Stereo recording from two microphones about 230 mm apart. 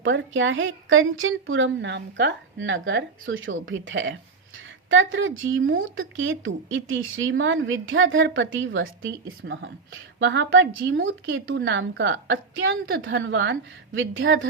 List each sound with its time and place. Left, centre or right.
0.0 s speech: right